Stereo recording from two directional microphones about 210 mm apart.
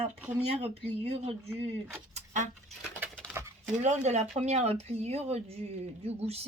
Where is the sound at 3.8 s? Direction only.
35° right (ahead or behind).